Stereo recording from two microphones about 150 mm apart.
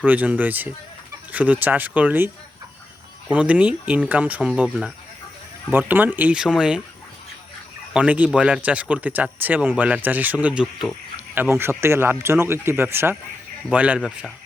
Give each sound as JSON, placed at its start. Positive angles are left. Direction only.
{"t": 0.0, "sound": "speech", "side_deg": -10}
{"t": 7.9, "sound": "speech", "side_deg": -10}
{"t": 11.3, "sound": "speech", "side_deg": -15}